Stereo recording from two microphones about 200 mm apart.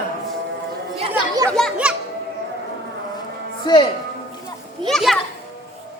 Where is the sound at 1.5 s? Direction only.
Centre (ahead or behind).